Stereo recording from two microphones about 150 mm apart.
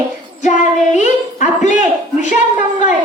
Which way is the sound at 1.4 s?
55° left (ahead or behind).